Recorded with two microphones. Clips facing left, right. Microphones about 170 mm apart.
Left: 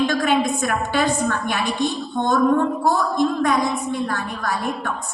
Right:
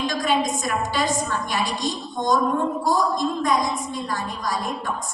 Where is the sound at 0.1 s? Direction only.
60° left (ahead or behind).